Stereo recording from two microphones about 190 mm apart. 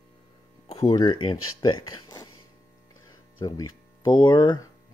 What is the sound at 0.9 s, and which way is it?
Speech, 25° left (ahead or behind).